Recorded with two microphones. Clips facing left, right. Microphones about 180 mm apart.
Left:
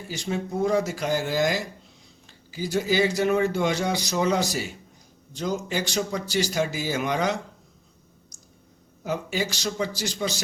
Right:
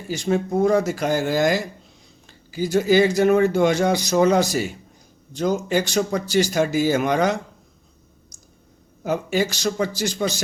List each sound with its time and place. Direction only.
0.1 s speech: 50° right (ahead or behind)
9.0 s speech: 50° right (ahead or behind)